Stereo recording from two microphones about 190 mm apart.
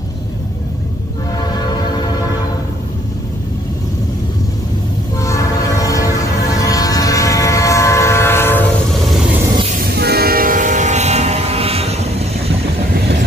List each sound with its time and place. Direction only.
5.2 s train: 15° left (ahead or behind)
9.8 s train: 55° right (ahead or behind); by 12.5 s 35° right (ahead or behind)